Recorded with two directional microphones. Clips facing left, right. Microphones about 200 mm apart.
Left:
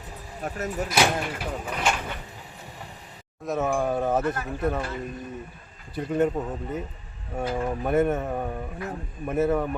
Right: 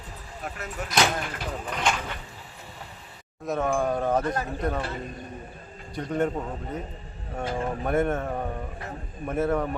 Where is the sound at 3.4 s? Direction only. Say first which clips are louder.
Even; centre (ahead or behind).